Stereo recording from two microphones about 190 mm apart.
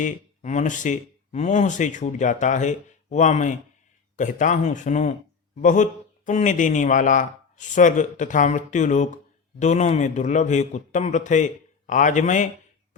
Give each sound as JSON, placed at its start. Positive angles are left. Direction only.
{"t": 0.0, "sound": "a man's voice", "side_deg": 40}